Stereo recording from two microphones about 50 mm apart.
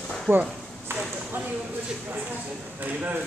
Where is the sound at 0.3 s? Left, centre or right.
Right.